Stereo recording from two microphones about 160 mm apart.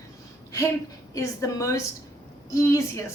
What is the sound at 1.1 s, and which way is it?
A woman's voice, 20° left (ahead or behind).